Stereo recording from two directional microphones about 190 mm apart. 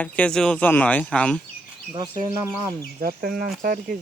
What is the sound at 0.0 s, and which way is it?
Speech, 5° left (ahead or behind).